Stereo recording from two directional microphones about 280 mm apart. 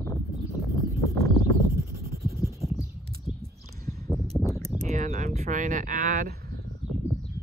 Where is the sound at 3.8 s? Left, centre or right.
Centre.